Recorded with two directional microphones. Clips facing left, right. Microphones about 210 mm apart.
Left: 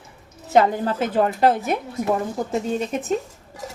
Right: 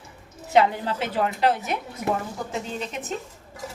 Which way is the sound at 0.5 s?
45° left (ahead or behind).